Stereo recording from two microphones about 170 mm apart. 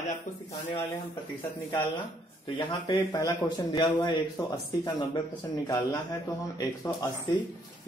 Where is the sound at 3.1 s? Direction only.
20° left (ahead or behind).